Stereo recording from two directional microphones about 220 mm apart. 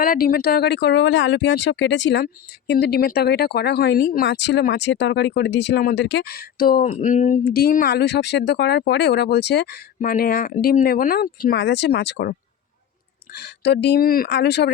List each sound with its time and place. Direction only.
0.0 s speech: 40° left (ahead or behind)
13.3 s speech: 50° left (ahead or behind)